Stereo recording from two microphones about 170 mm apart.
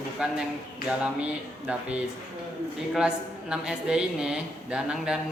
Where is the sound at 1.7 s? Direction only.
10° right (ahead or behind).